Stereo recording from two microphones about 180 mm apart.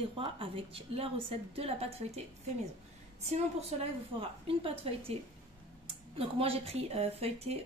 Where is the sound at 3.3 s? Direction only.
35° right (ahead or behind).